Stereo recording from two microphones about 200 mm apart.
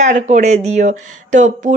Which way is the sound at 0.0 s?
35° right (ahead or behind).